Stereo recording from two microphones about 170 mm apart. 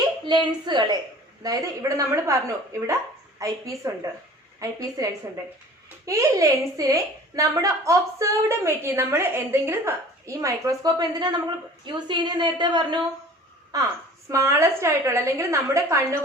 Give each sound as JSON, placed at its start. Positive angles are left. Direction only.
{"t": 0.3, "sound": "a woman's voice", "side_deg": -25}